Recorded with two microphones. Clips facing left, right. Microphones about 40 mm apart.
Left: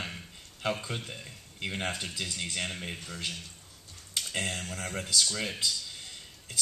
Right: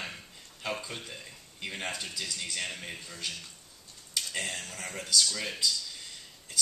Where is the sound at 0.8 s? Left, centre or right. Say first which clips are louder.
Left 3 dB; centre.